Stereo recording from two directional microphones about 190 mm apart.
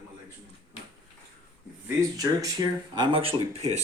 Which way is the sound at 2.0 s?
15° right (ahead or behind).